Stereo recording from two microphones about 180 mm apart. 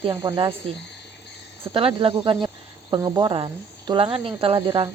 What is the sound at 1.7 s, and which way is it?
Speech, 30° right (ahead or behind).